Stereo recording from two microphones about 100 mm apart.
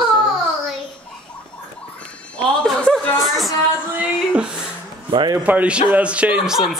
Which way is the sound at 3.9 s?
15° right (ahead or behind).